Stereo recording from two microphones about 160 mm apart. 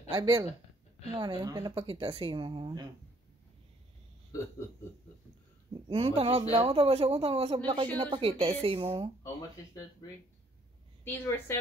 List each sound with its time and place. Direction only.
0.1 s speech: 25° right (ahead or behind)
5.7 s a man's voice: 35° right (ahead or behind)
11.1 s a woman's voice: 15° left (ahead or behind)